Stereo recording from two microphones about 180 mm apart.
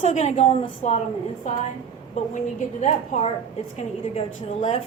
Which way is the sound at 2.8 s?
40° left (ahead or behind).